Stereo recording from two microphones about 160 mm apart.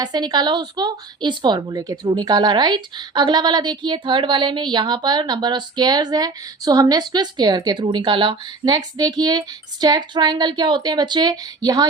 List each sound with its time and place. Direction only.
0.0 s a woman's voice: 25° right (ahead or behind)